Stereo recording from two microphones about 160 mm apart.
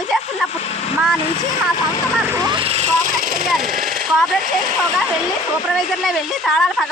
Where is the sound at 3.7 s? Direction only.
60° right (ahead or behind).